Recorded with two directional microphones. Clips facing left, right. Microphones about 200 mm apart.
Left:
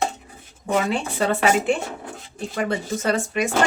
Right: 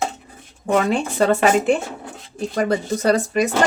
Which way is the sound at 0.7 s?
40° right (ahead or behind).